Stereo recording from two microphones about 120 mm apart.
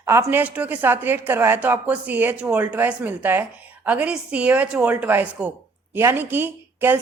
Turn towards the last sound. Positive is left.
turn(degrees=-20)  # may be behind; listen again after turning